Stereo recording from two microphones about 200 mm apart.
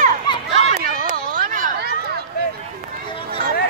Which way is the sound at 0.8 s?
45° right (ahead or behind).